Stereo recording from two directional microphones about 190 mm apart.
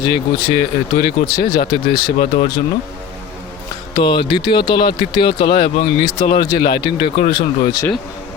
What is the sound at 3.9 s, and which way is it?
Speech, 25° left (ahead or behind).